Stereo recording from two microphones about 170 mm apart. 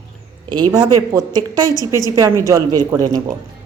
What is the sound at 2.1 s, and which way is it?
A woman's voice, 15° right (ahead or behind).